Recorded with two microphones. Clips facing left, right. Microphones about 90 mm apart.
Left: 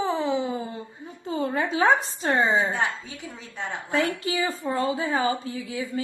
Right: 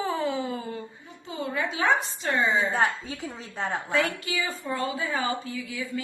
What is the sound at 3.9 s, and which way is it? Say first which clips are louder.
A woman's voice: left 5 dB; 35° left (ahead or behind).